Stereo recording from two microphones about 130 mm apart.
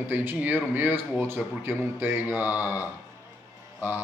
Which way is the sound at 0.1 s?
15° right (ahead or behind).